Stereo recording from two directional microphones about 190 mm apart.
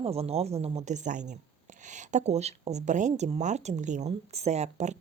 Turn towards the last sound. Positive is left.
turn(degrees=-35)  # may be behind; listen again after turning